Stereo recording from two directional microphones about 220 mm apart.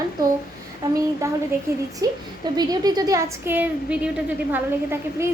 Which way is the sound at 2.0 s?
15° right (ahead or behind).